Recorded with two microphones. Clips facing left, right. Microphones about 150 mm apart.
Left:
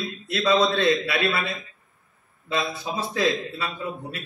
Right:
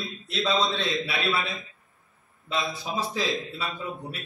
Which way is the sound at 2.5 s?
60° left (ahead or behind).